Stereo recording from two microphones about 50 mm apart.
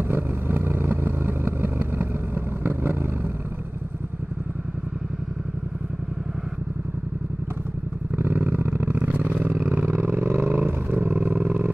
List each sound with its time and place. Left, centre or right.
0.1 s vehicle: right
8.2 s vehicle: right
9.0 s vehicle: right
9.4 s roar: right